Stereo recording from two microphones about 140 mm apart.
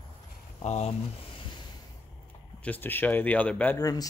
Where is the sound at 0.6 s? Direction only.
55° left (ahead or behind).